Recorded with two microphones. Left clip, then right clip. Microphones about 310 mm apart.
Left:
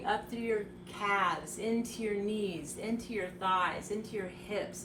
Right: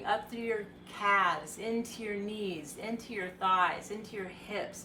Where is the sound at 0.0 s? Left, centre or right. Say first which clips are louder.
Right 1 dB; centre.